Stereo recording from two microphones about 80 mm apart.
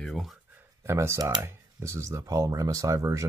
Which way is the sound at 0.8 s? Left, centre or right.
Right.